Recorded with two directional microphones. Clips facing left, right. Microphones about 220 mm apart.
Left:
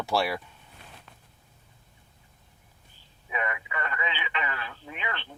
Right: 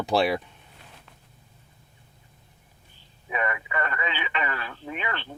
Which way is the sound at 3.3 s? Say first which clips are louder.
Right 4 dB; 40° right (ahead or behind).